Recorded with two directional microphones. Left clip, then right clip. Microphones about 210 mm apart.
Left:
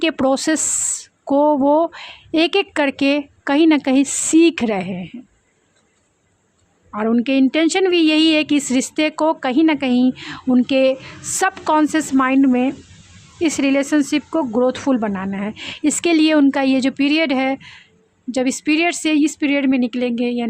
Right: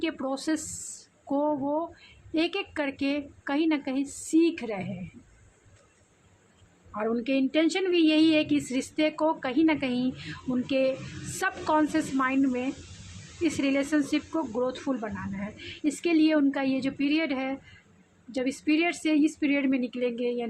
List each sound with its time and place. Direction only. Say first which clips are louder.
0.0 s speech: left 14 dB; 45° left (ahead or behind)
6.9 s speech: left 10 dB; 45° left (ahead or behind)